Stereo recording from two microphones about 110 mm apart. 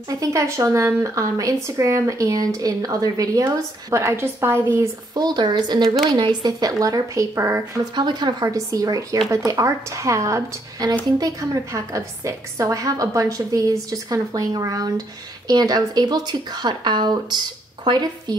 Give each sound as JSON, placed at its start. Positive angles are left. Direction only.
{"t": 0.1, "sound": "speech", "side_deg": -30}
{"t": 5.1, "sound": "speech", "side_deg": -40}
{"t": 7.9, "sound": "speech", "side_deg": -40}